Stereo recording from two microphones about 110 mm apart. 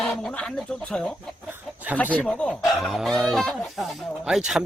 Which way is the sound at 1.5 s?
15° right (ahead or behind).